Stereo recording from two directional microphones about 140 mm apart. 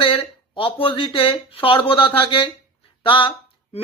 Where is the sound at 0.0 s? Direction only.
40° left (ahead or behind).